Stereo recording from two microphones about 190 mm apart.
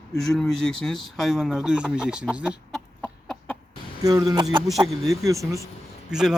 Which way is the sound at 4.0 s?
20° right (ahead or behind).